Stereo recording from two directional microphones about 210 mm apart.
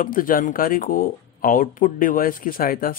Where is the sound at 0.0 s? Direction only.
40° left (ahead or behind).